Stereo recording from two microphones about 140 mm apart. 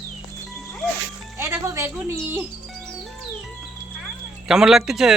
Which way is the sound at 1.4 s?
20° right (ahead or behind).